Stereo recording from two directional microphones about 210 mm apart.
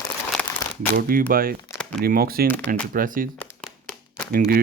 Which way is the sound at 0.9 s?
45° right (ahead or behind).